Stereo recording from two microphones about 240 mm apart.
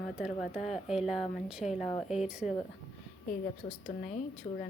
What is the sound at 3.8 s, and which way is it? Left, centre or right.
Speech, left.